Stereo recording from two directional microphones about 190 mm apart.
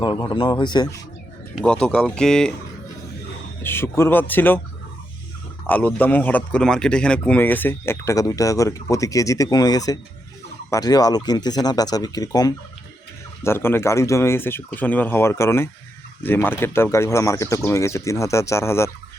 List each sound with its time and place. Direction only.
0.0 s speech: 25° left (ahead or behind)
1.5 s speech: 5° left (ahead or behind)
3.6 s a man's voice: 10° left (ahead or behind)
5.6 s a man's voice: 10° left (ahead or behind)